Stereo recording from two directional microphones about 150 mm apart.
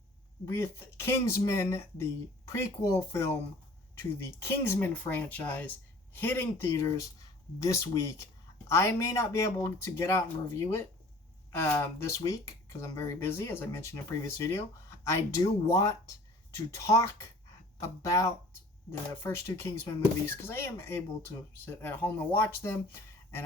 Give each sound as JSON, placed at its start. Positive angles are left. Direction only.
{"t": 0.4, "sound": "speech", "side_deg": 15}